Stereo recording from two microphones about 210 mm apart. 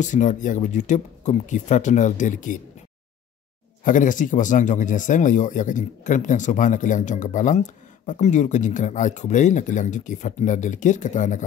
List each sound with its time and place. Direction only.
0.0 s speech: 35° left (ahead or behind)
3.8 s speech: 40° left (ahead or behind)